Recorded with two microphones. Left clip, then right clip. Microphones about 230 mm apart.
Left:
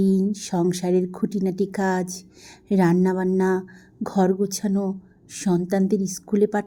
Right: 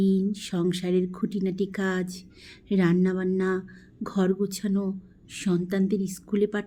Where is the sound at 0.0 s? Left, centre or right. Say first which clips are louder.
Left 4 dB; centre.